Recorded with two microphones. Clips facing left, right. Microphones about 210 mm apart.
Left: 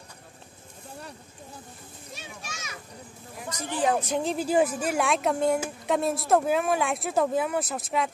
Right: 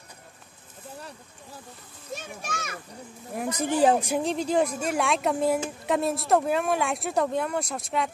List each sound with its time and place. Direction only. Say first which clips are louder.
2.1 s a child's voice: right 7 dB; 50° right (ahead or behind)
3.8 s speech: right 4 dB; 35° right (ahead or behind)
4.2 s speech: even; 5° left (ahead or behind)